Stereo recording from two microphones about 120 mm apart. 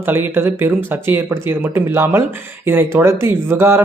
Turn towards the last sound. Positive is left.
turn(degrees=-20)  # may be behind; listen again after turning